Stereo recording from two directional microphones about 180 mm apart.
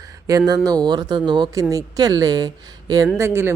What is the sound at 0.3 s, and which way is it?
Speech, 20° right (ahead or behind).